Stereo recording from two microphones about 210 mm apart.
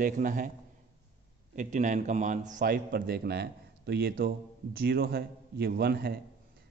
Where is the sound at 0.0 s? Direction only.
40° right (ahead or behind).